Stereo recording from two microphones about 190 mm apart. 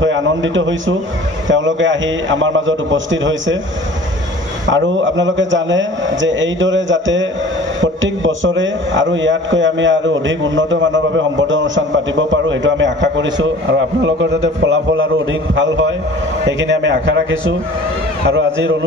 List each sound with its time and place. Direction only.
0.0 s a man's voice: 80° right
4.6 s a man's voice: 80° right